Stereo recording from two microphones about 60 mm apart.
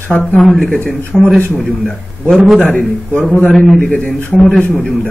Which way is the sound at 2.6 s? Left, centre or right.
Left.